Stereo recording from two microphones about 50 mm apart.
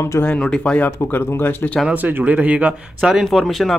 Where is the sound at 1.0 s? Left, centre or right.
Left.